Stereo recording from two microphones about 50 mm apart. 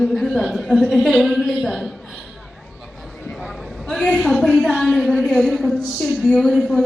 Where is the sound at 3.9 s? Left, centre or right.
Centre.